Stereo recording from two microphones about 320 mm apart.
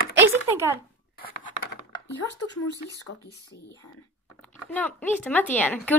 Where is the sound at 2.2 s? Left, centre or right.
Centre.